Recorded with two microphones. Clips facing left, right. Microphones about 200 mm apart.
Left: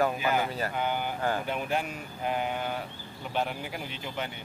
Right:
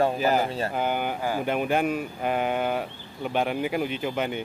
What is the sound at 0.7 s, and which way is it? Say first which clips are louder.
Speech: right 4 dB; 50° right (ahead or behind).